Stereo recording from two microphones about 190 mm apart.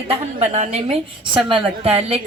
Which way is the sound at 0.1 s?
35° right (ahead or behind).